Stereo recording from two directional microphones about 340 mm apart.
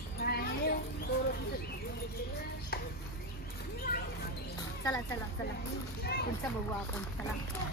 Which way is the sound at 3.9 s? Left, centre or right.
Left.